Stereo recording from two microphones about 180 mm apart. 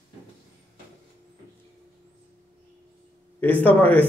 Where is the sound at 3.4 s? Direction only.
10° left (ahead or behind).